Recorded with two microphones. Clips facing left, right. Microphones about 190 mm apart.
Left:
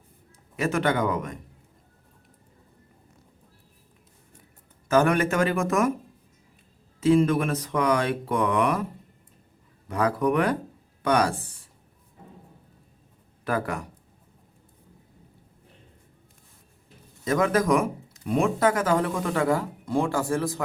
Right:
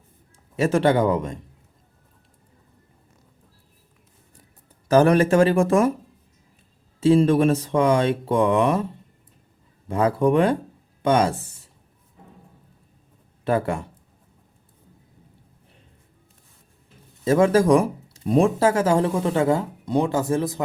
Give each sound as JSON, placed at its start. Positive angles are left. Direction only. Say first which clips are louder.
{"t": 0.5, "sound": "speech", "louder": "right 6 dB", "side_deg": -30}
{"t": 4.9, "sound": "speech", "louder": "right 5 dB", "side_deg": -35}
{"t": 7.0, "sound": "speech", "louder": "right 4 dB", "side_deg": -30}
{"t": 9.9, "sound": "speech", "louder": "right 4 dB", "side_deg": -25}
{"t": 13.4, "sound": "speech", "louder": "right 5 dB", "side_deg": -25}
{"t": 17.2, "sound": "speech", "louder": "right 6 dB", "side_deg": -30}